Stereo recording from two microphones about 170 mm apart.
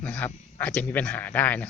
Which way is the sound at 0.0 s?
10° left (ahead or behind).